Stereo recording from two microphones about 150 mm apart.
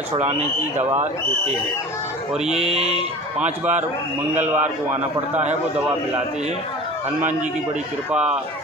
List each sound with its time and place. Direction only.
0.3 s speech: 50° right (ahead or behind)
2.3 s mantra: 5° right (ahead or behind)
2.6 s speech: 45° right (ahead or behind)
4.4 s a man's voice: 10° right (ahead or behind)
8.1 s a man's voice: 5° right (ahead or behind)